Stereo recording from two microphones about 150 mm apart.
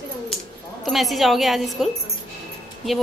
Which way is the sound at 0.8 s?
Centre (ahead or behind).